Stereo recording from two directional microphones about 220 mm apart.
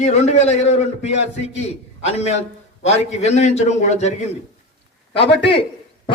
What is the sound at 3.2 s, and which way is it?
A man's voice, 30° left (ahead or behind).